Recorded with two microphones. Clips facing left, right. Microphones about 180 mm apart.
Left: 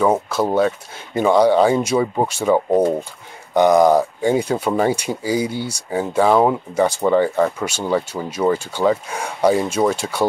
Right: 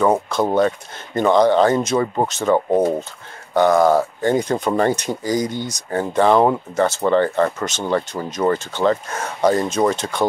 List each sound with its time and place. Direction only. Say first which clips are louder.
0.0 s speech: even; 5° left (ahead or behind)